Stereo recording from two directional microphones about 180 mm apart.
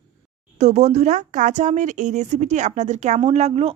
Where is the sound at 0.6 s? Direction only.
40° right (ahead or behind).